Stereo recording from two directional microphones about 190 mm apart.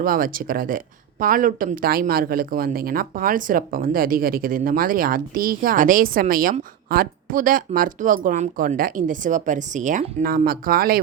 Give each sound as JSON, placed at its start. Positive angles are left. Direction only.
{"t": 0.0, "sound": "speech", "side_deg": -50}